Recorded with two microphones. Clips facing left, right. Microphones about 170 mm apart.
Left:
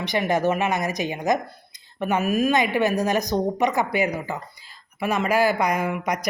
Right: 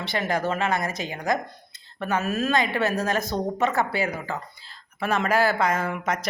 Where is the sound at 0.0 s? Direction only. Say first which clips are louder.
Left 4 dB; 15° left (ahead or behind).